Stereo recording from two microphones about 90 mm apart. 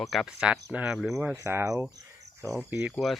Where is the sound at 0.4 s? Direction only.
15° right (ahead or behind).